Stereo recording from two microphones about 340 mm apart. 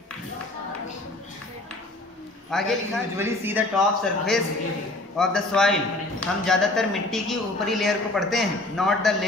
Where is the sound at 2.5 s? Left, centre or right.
Centre.